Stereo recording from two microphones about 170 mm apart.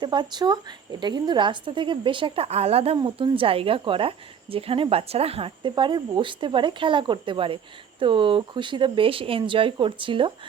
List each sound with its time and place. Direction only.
0.0 s a woman's voice: 25° right (ahead or behind)